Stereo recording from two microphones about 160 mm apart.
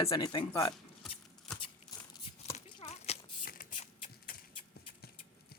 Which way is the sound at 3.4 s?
60° left (ahead or behind).